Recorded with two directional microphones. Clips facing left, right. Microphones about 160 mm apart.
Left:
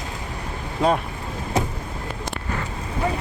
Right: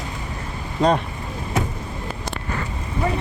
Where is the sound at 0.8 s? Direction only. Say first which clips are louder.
Right 2 dB; 5° left (ahead or behind).